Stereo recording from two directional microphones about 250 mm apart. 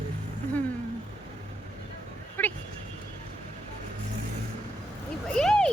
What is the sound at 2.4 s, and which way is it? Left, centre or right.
Vehicle, centre.